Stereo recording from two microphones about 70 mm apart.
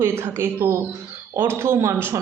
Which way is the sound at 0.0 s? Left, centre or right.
Right.